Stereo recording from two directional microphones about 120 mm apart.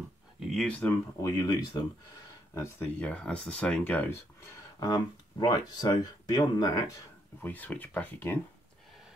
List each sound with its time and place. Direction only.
0.4 s a sound: centre (ahead or behind)
0.7 s speech: 10° left (ahead or behind)
1.4 s speech: 30° left (ahead or behind)
3.0 s speech: 10° left (ahead or behind)
4.7 s speech: 35° left (ahead or behind)
7.4 s speech: 15° left (ahead or behind)